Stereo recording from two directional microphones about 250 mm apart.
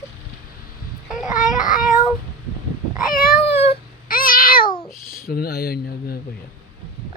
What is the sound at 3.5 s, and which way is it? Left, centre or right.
Cat, left.